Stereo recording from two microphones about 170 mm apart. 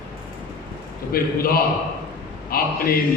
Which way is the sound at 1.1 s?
60° left (ahead or behind).